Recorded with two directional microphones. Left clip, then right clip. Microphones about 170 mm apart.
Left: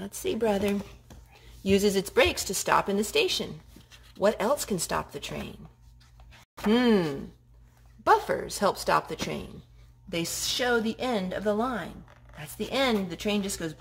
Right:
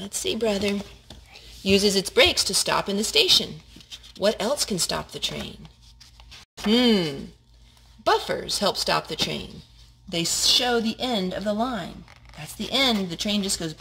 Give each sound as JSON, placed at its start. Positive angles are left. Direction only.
{"t": 0.0, "sound": "speech", "side_deg": -5}
{"t": 6.7, "sound": "a woman's voice", "side_deg": -5}